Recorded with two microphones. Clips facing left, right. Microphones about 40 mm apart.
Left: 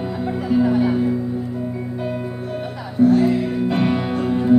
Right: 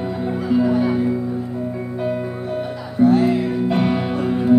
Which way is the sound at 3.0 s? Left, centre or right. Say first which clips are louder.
Even; right.